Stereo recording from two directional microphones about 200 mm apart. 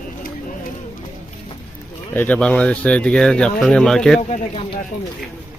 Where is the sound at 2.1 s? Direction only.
10° left (ahead or behind).